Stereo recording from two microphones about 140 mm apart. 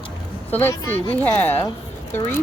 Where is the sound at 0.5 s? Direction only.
15° left (ahead or behind).